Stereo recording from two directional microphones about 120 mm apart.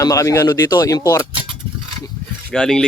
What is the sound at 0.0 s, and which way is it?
Speech, 30° left (ahead or behind).